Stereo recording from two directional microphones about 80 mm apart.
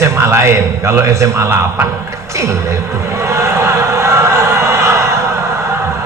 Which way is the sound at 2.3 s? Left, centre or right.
Right.